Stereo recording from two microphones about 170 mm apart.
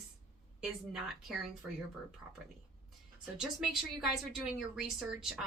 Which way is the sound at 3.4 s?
Centre (ahead or behind).